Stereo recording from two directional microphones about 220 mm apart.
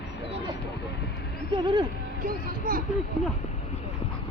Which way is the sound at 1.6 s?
20° right (ahead or behind).